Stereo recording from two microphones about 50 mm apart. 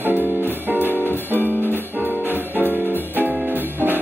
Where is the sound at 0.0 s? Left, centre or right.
Right.